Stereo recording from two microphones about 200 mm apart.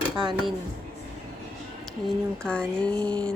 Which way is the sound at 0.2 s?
25° right (ahead or behind).